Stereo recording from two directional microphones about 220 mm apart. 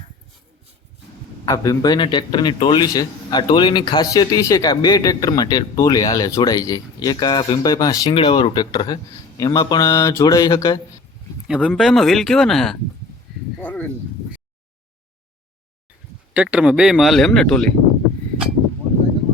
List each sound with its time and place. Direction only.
1.5 s a man's voice: 15° left (ahead or behind)
11.4 s speech: 5° right (ahead or behind)
13.6 s a sound: 5° left (ahead or behind)
16.3 s speech: 5° right (ahead or behind)